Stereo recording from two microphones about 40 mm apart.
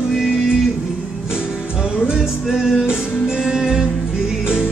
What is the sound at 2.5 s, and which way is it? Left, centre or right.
Music, centre.